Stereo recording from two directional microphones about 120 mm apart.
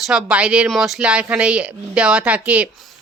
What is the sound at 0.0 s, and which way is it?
Speech, 5° right (ahead or behind).